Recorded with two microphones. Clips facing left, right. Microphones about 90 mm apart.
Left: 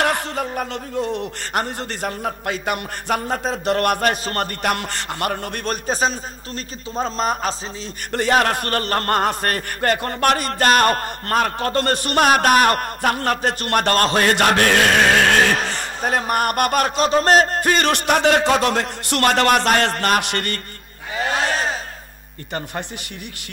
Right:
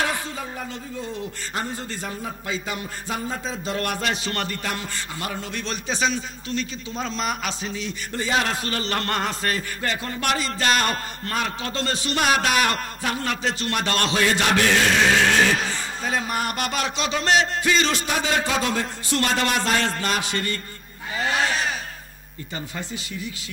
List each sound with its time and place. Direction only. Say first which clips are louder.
0.0 s speech: left 6 dB; 65° left (ahead or behind); by 4.6 s 45° left (ahead or behind)
4.6 s a man's voice: left 7 dB; 60° left (ahead or behind); by 7.9 s 40° left (ahead or behind)
8.1 s a man's voice: left 7 dB; 60° left (ahead or behind)
21.3 s crowd: left 2 dB; 40° left (ahead or behind)